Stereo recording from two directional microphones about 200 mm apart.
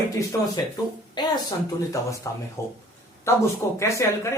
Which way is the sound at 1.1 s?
20° left (ahead or behind).